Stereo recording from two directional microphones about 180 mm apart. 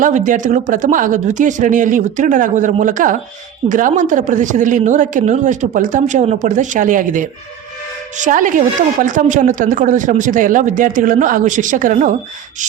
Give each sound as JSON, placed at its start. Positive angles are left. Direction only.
{"t": 0.0, "sound": "a woman's voice", "side_deg": -45}